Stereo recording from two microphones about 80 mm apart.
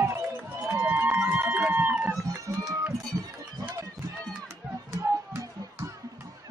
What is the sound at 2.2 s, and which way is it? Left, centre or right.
Music, right.